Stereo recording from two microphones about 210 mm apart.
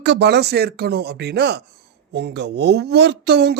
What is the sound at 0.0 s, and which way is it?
Speech, 55° right (ahead or behind).